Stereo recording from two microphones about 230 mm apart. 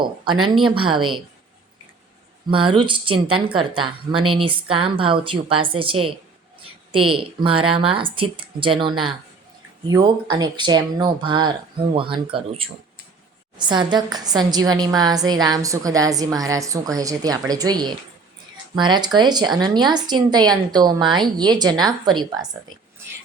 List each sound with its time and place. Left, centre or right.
0.6 s speech: right
2.5 s speech: right
9.9 s a woman's voice: centre